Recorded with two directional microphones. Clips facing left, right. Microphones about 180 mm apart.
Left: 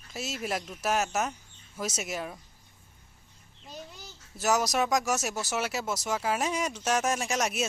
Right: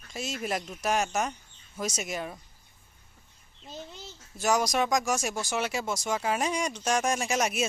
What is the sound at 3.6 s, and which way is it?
Babbling, 25° right (ahead or behind).